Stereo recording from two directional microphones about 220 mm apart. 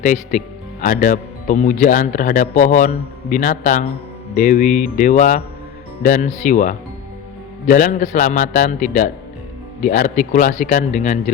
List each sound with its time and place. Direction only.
0.0 s speech: 35° left (ahead or behind)